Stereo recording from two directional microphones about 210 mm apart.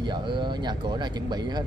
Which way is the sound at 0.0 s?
20° right (ahead or behind).